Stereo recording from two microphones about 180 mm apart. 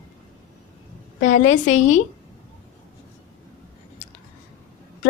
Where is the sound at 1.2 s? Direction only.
45° left (ahead or behind).